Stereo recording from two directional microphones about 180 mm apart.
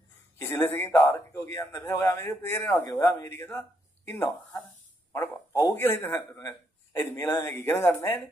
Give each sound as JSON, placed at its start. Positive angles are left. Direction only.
{"t": 0.4, "sound": "a man's voice", "side_deg": 15}
{"t": 5.1, "sound": "a man's voice", "side_deg": 15}